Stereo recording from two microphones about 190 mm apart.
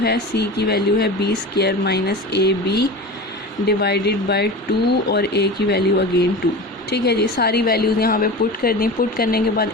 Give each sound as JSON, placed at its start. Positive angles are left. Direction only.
{"t": 0.0, "sound": "a woman's voice", "side_deg": 60}